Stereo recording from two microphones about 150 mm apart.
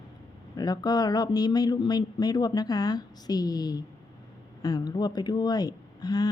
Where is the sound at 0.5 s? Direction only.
25° left (ahead or behind).